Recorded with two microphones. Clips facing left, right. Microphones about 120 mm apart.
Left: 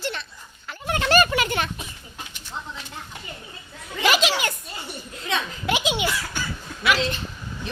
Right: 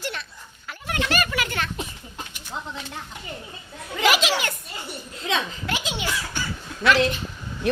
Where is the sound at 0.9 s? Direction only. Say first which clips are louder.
Left 5 dB; 35° left (ahead or behind).